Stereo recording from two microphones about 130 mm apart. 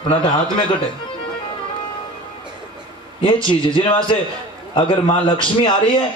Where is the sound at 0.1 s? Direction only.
45° left (ahead or behind).